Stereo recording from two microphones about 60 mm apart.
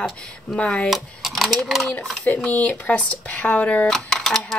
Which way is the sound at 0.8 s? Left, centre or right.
Centre.